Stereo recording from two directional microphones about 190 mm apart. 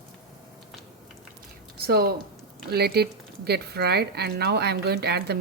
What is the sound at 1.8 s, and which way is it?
Speech, 55° right (ahead or behind).